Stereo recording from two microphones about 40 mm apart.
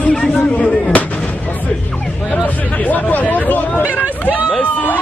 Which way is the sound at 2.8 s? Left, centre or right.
Left.